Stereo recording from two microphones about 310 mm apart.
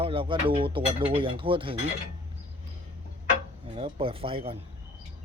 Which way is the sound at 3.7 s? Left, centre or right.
Centre.